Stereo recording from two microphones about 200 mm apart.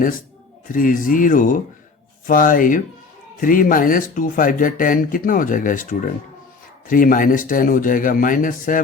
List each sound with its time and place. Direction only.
0.7 s speech: 45° left (ahead or behind)